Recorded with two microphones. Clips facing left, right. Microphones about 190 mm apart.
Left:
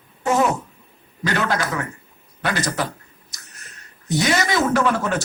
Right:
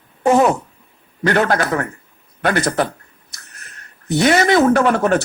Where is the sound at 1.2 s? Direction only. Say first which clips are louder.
Right 6 dB; 60° right (ahead or behind).